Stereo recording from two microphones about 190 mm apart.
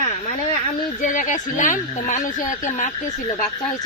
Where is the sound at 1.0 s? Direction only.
45° left (ahead or behind).